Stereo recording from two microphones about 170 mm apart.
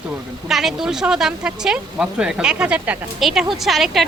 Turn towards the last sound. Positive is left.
turn(degrees=0)  # may be behind; listen again after turning